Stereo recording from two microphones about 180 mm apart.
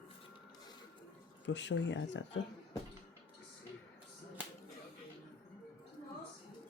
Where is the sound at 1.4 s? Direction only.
85° left.